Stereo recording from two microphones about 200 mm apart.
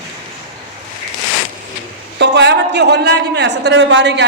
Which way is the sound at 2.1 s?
60° right (ahead or behind).